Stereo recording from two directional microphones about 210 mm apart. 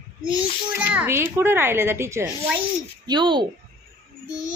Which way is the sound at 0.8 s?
5° right (ahead or behind).